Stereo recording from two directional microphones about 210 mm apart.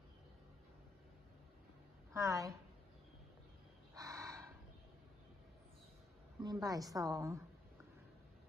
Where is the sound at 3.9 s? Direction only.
15° right (ahead or behind).